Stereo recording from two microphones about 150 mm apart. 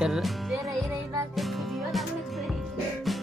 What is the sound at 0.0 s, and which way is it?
Music, centre (ahead or behind).